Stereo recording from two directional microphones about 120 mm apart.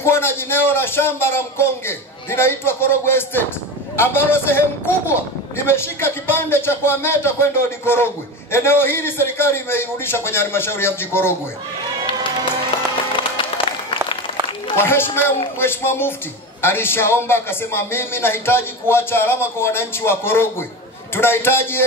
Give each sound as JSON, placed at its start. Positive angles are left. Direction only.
{"t": 0.0, "sound": "a man's voice", "side_deg": 20}
{"t": 13.1, "sound": "music", "side_deg": 45}
{"t": 14.8, "sound": "a man's voice", "side_deg": 20}